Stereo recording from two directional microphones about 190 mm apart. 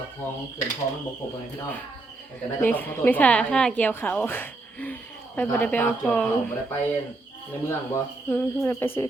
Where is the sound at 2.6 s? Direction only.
10° left (ahead or behind).